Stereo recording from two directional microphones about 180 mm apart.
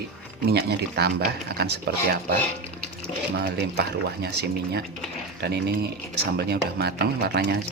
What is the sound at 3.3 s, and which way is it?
Speech, 60° right (ahead or behind).